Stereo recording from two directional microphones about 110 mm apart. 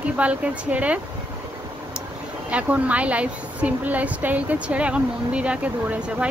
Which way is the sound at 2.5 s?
10° right (ahead or behind).